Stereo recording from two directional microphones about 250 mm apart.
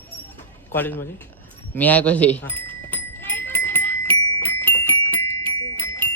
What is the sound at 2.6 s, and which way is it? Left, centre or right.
Music, centre.